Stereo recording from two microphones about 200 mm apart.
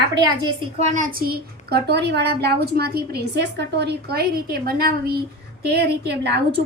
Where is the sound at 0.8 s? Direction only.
40° right (ahead or behind).